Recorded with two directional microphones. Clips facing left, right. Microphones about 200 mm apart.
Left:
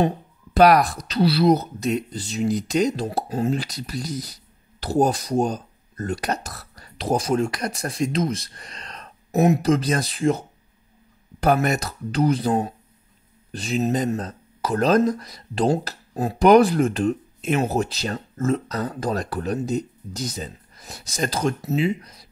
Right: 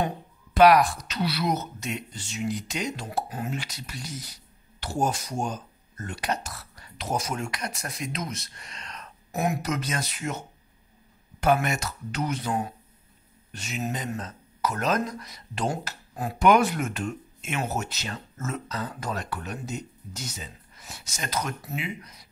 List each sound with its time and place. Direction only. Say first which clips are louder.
0.6 s speech: left 2 dB; 40° left (ahead or behind)
9.3 s speech: left 10 dB; 25° left (ahead or behind)
11.4 s speech: left 4 dB; 40° left (ahead or behind)